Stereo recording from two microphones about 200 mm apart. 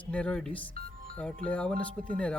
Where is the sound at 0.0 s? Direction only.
5° left (ahead or behind).